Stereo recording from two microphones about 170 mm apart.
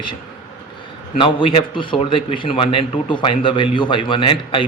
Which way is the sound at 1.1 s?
30° left (ahead or behind).